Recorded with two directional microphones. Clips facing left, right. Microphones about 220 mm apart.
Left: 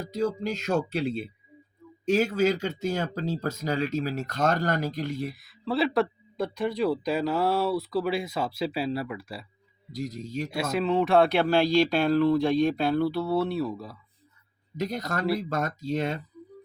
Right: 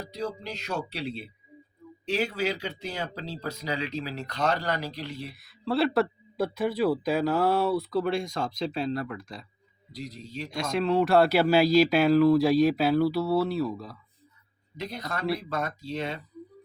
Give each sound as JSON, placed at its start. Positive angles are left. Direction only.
{"t": 0.0, "sound": "speech", "side_deg": 45}
{"t": 5.3, "sound": "a man's voice", "side_deg": 0}
{"t": 9.9, "sound": "speech", "side_deg": 45}
{"t": 10.5, "sound": "a man's voice", "side_deg": 5}
{"t": 14.8, "sound": "speech", "side_deg": 45}